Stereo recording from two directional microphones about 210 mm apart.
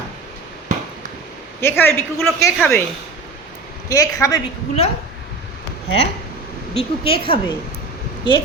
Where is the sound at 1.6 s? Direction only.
10° left (ahead or behind).